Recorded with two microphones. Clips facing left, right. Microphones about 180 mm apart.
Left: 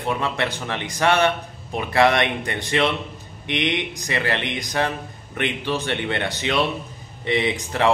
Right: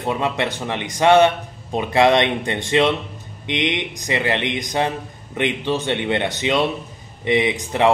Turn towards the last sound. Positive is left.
turn(degrees=-20)  # may be behind; listen again after turning